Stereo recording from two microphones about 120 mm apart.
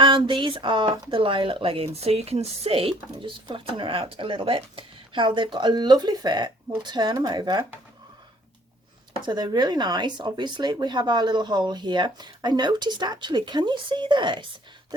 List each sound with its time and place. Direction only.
0.0 s speech: 45° right (ahead or behind)
9.2 s speech: 35° right (ahead or behind)